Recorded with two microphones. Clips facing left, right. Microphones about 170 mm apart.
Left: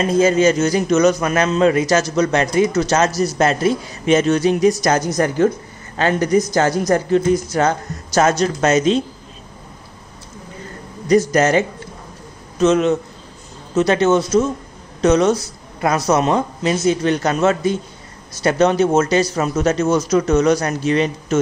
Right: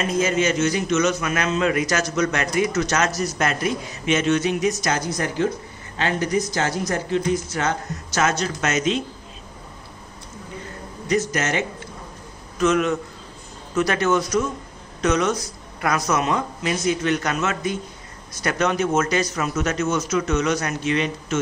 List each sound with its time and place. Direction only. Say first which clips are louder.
0.0 s speech: left 7 dB; 30° left (ahead or behind)
11.1 s speech: left 8 dB; 35° left (ahead or behind)
12.5 s speech: left 5 dB; 25° left (ahead or behind)